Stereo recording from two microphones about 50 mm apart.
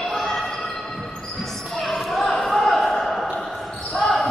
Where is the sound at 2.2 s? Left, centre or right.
Centre.